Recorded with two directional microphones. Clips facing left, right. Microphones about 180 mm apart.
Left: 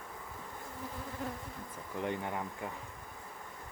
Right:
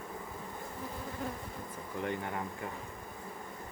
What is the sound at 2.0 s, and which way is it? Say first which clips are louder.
Speech: even; 25° left (ahead or behind).